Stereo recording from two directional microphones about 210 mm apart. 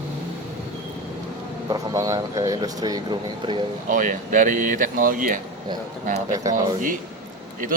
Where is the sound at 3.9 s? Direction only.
35° right (ahead or behind).